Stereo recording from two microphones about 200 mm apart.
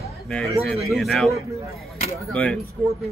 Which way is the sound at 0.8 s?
Centre (ahead or behind).